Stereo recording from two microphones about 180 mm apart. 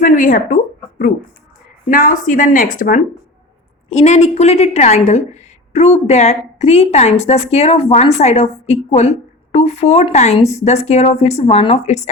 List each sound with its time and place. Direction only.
0.0 s a sound: 50° left (ahead or behind)
1.9 s speech: 50° left (ahead or behind)
3.8 s a woman's voice: 35° left (ahead or behind)